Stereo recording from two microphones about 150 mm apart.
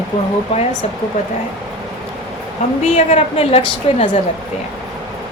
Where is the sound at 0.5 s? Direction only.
40° left (ahead or behind).